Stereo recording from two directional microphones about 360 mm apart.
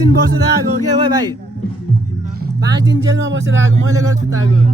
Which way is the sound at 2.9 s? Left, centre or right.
Right.